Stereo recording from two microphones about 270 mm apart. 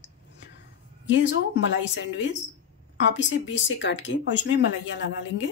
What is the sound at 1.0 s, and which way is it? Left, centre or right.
Speech, left.